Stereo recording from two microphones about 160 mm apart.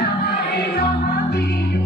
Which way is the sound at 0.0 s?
90° left.